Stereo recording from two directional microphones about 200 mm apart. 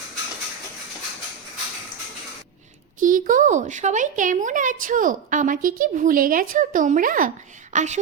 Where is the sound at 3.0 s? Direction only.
40° right (ahead or behind).